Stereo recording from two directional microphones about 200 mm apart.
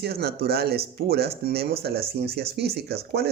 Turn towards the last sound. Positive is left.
turn(degrees=-55)  # may be behind; listen again after turning